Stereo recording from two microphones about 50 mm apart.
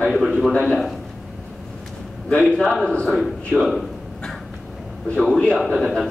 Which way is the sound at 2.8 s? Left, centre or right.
Centre.